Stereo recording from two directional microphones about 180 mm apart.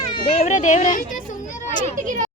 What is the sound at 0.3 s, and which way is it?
Speech, 40° left (ahead or behind).